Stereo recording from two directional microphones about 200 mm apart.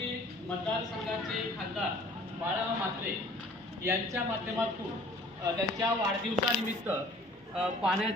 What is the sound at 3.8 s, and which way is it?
Speech, 10° right (ahead or behind).